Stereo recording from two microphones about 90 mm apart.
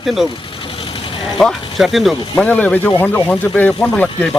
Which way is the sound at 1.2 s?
Centre (ahead or behind).